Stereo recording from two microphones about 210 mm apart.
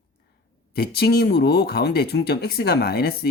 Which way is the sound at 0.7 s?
50° left (ahead or behind).